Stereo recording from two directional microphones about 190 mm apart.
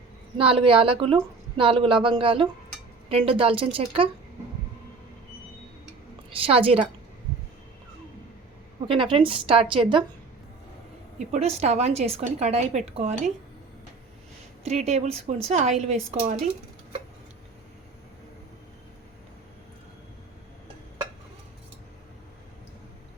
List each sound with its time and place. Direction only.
0.3 s a woman's voice: 30° right (ahead or behind)
6.4 s a woman's voice: 30° right (ahead or behind)
8.9 s a woman's voice: 25° right (ahead or behind)
11.2 s a woman's voice: 35° right (ahead or behind)
14.6 s a woman's voice: 35° right (ahead or behind)